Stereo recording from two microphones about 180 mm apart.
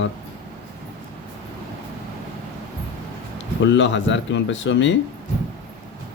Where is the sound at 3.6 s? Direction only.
90° left.